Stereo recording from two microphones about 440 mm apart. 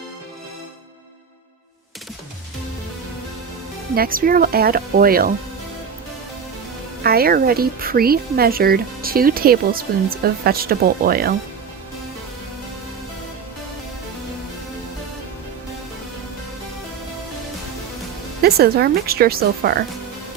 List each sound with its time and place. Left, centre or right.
3.9 s speech: centre
7.0 s speech: right
18.4 s speech: right